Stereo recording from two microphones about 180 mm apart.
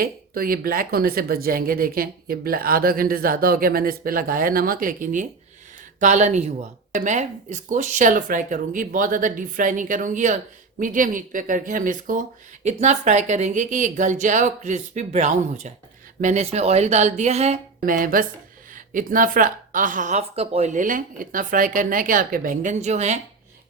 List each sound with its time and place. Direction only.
0.0 s a woman's voice: 55° right (ahead or behind); by 17.6 s 35° right (ahead or behind)
17.8 s speech: 50° right (ahead or behind)